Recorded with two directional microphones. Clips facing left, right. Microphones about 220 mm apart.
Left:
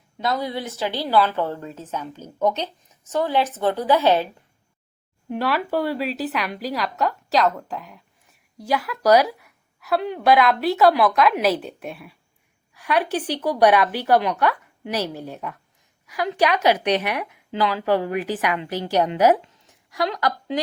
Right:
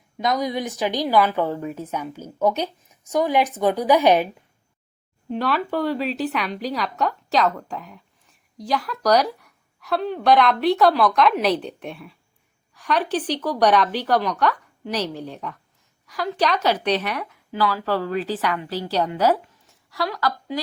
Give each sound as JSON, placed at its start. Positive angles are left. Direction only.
{"t": 0.2, "sound": "a woman's voice", "side_deg": -15}
{"t": 5.3, "sound": "a woman's voice", "side_deg": 5}